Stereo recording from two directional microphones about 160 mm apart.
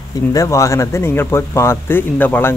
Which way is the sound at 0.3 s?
20° left (ahead or behind).